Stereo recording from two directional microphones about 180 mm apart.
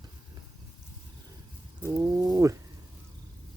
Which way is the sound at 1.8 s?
20° right (ahead or behind).